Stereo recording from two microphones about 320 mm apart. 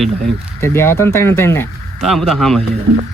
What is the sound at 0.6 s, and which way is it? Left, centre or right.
Speech, centre.